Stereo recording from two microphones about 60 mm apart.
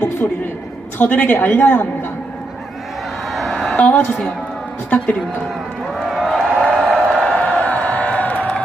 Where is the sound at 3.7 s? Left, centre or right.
Left.